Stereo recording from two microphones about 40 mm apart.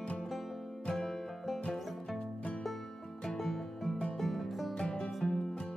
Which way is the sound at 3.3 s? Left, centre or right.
Centre.